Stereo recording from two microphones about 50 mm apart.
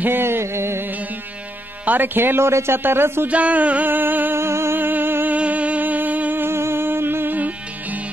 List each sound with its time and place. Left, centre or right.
0.0 s music: right
1.9 s speech: right
3.3 s music: right
4.4 s music: right
4.7 s music: right
5.3 s music: right
6.4 s music: right
7.3 s music: right